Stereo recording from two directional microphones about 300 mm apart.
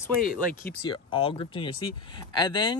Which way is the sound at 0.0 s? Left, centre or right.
Centre.